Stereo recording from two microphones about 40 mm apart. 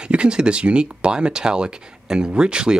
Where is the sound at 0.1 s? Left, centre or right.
Right.